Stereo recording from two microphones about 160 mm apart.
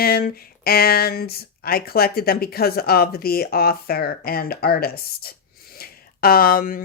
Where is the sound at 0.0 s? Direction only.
75° left (ahead or behind).